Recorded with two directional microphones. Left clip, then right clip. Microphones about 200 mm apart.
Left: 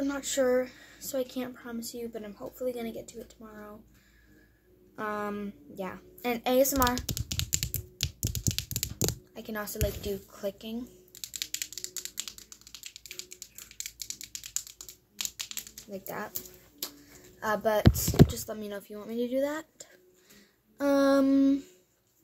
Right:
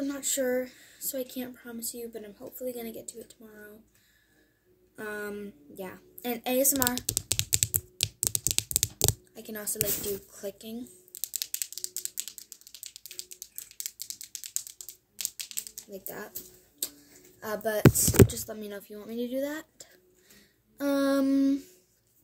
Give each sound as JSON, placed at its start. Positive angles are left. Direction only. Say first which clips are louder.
{"t": 0.0, "sound": "speech", "louder": "left 2 dB", "side_deg": -5}
{"t": 4.9, "sound": "speech", "louder": "left 3 dB", "side_deg": -5}
{"t": 7.0, "sound": "typing", "louder": "right 3 dB", "side_deg": -30}
{"t": 9.3, "sound": "speech", "louder": "left 2 dB", "side_deg": 0}
{"t": 11.1, "sound": "typing", "louder": "even", "side_deg": -10}
{"t": 13.7, "sound": "typing", "louder": "left 1 dB", "side_deg": -10}
{"t": 15.9, "sound": "speech", "louder": "left 5 dB", "side_deg": -5}
{"t": 17.4, "sound": "speech", "louder": "even", "side_deg": 0}